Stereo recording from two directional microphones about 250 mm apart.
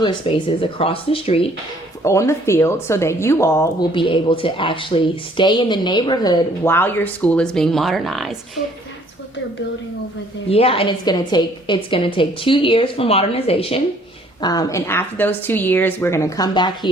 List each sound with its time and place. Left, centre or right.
0.0 s a woman's voice: centre
2.0 s a woman's voice: centre
10.5 s a woman's voice: left